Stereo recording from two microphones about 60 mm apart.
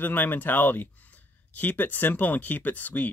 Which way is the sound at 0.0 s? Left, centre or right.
Left.